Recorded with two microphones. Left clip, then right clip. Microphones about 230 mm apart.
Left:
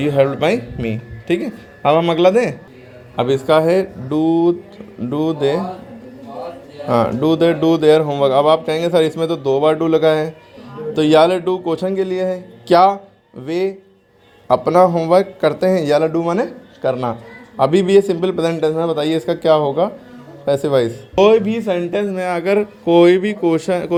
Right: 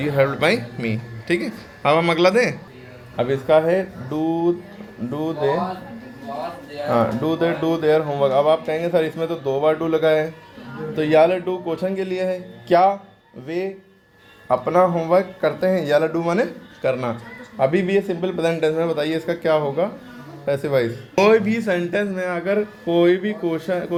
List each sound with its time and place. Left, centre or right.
0.0 s speech: left
6.9 s speech: left
17.6 s speech: left